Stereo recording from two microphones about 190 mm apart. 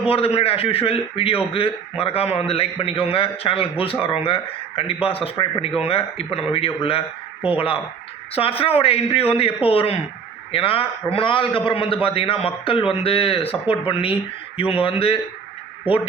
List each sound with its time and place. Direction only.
0.0 s a man's voice: 30° left (ahead or behind)
8.4 s a man's voice: 30° left (ahead or behind)